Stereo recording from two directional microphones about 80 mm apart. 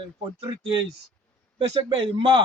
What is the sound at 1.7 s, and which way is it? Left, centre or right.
Speech, right.